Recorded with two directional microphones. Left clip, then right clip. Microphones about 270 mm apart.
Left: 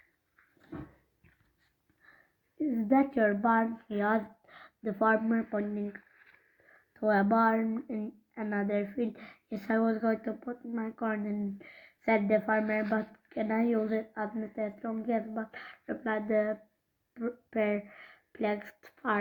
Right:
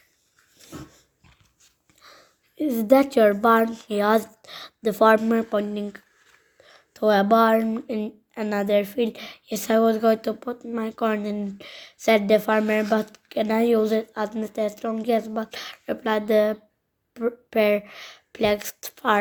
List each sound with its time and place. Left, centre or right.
2.6 s speech: right